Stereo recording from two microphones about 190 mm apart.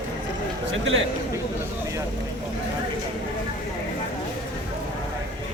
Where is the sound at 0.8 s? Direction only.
80° right.